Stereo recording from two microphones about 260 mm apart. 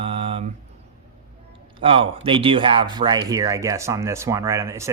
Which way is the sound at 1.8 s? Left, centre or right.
Right.